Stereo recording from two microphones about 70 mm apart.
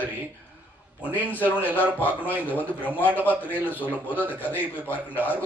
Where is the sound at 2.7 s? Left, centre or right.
Right.